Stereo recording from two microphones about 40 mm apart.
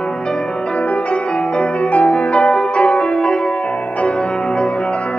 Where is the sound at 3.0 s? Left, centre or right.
Centre.